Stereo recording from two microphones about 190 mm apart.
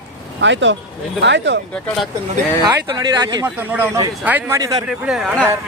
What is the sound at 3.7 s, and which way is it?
Speech, 10° right (ahead or behind).